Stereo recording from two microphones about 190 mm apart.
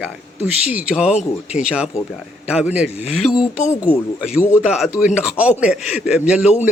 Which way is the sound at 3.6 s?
35° left (ahead or behind).